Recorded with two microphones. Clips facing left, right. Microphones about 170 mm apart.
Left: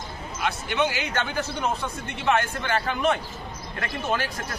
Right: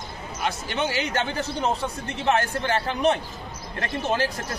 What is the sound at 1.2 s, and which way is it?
A man's voice, 30° right (ahead or behind).